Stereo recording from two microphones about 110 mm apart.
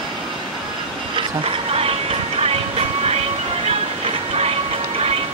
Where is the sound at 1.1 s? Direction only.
60° right (ahead or behind).